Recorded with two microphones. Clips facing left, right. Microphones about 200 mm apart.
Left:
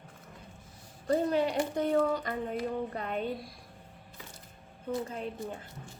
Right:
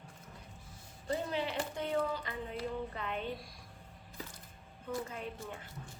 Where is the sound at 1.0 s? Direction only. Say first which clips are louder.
Left 8 dB; 45° left (ahead or behind).